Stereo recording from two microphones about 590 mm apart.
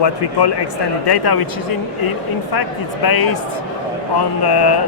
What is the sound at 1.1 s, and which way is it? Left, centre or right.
Speech, left.